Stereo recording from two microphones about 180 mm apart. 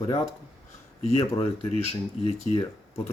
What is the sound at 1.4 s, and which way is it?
Speech, 35° left (ahead or behind).